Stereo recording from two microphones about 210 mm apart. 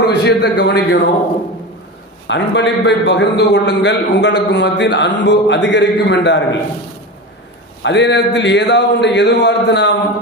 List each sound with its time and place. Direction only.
0.1 s a man's voice: 50° left (ahead or behind)
2.2 s a man's voice: 60° left (ahead or behind)
7.8 s a man's voice: 55° left (ahead or behind)